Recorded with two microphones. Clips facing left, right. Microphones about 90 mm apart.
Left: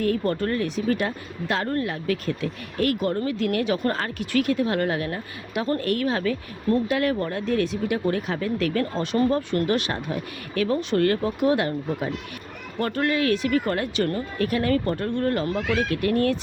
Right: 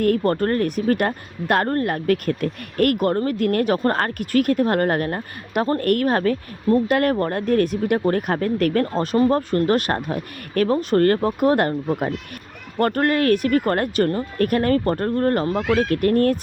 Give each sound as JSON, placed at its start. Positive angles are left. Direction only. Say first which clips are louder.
{"t": 0.0, "sound": "speech", "louder": "right 5 dB", "side_deg": -50}
{"t": 15.4, "sound": "speech", "louder": "right 4 dB", "side_deg": -30}
{"t": 15.7, "sound": "speech", "louder": "right 6 dB", "side_deg": -45}